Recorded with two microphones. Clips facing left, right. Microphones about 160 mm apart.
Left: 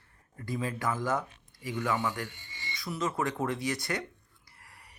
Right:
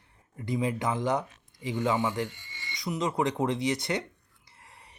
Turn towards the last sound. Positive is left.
turn(degrees=-25)  # may be behind; listen again after turning